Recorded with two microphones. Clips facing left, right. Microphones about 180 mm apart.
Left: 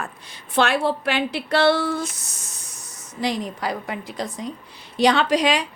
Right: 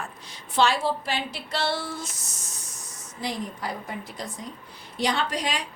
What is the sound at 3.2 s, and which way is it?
A woman's voice, 90° left.